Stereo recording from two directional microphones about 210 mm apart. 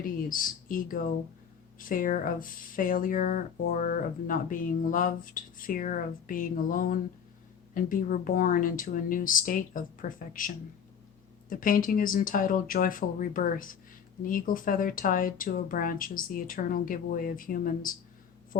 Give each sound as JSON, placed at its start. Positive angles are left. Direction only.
{"t": 0.3, "sound": "speech", "side_deg": 40}